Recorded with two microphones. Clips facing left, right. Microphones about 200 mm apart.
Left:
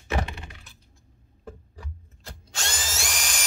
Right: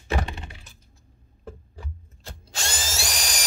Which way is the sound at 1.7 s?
30° right (ahead or behind).